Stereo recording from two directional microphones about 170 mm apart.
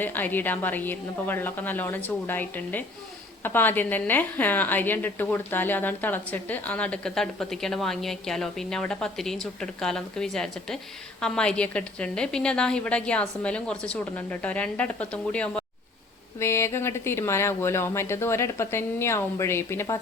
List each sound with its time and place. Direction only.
0.0 s a woman's voice: 10° left (ahead or behind)